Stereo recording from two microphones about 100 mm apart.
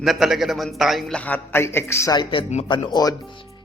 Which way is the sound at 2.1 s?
50° left (ahead or behind).